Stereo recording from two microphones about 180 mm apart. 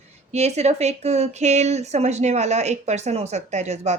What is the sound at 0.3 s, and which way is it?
A woman's voice, 40° right (ahead or behind).